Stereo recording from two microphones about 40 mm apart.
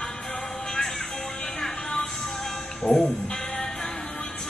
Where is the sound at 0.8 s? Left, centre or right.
Centre.